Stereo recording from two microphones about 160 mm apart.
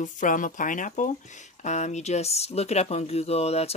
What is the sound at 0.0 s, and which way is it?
Speech, 55° left (ahead or behind).